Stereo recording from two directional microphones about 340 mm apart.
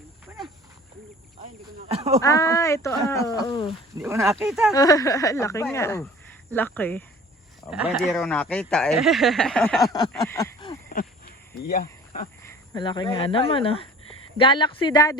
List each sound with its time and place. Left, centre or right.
1.9 s speech: centre
2.2 s speech: centre
3.7 s speech: centre
4.7 s speech: centre
11.5 s speech: left
12.4 s speech: centre